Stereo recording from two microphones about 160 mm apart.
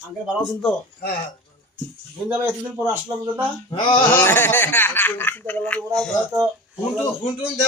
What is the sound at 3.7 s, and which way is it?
Speech, 30° left (ahead or behind).